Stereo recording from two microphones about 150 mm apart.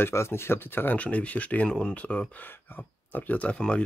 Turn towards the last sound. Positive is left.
turn(degrees=5)  # may be behind; listen again after turning